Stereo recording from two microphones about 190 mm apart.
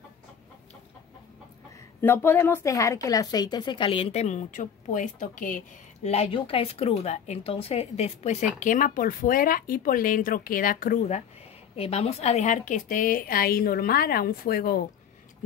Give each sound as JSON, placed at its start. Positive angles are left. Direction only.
{"t": 2.0, "sound": "a woman's voice", "side_deg": 10}
{"t": 6.0, "sound": "a woman's voice", "side_deg": 30}